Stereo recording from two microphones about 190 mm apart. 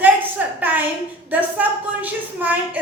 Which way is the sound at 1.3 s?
10° right (ahead or behind).